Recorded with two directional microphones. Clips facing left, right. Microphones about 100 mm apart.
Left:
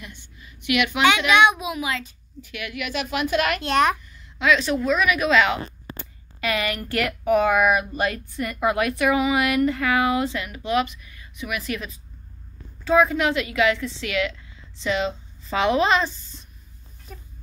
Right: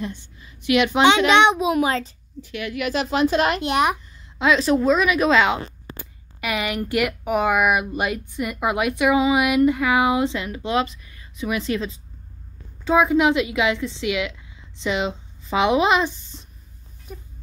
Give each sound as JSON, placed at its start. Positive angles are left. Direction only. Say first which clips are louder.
{"t": 0.0, "sound": "a child's voice", "louder": "right 11 dB", "side_deg": -30}
{"t": 1.7, "sound": "a woman's voice", "louder": "right 7 dB", "side_deg": -40}
{"t": 3.6, "sound": "speech", "louder": "even", "side_deg": -15}
{"t": 4.1, "sound": "a woman's voice", "louder": "right 1 dB", "side_deg": -30}
{"t": 17.1, "sound": "speech", "louder": "right 4 dB", "side_deg": -5}